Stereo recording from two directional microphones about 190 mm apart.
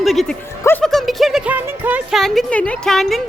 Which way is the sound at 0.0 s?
Centre (ahead or behind).